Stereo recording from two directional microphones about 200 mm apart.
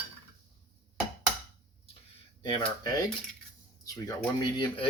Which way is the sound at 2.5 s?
20° left (ahead or behind).